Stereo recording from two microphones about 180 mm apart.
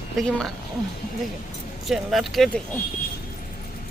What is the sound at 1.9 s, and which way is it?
Speech, centre (ahead or behind).